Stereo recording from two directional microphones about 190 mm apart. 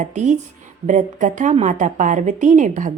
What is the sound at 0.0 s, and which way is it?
Speech, 40° right (ahead or behind).